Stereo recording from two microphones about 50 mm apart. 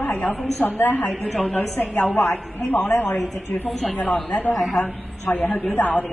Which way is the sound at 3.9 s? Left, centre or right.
Left.